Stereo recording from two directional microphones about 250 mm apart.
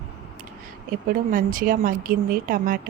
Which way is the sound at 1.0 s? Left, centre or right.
Right.